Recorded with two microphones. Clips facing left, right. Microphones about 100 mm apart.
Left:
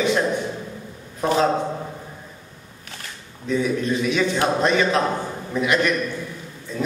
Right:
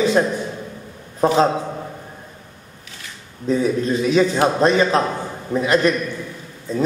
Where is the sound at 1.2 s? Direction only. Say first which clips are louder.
Right 4 dB; 35° right (ahead or behind).